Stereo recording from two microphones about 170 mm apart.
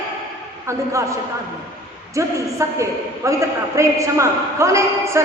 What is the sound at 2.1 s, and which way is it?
A man's voice, 20° right (ahead or behind).